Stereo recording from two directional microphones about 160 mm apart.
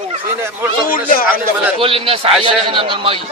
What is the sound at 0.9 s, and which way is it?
Speech, 65° left (ahead or behind).